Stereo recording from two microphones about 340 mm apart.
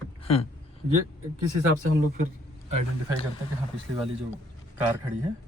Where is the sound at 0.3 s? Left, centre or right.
Centre.